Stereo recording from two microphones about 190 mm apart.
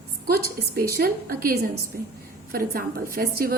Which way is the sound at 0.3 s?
50° right (ahead or behind).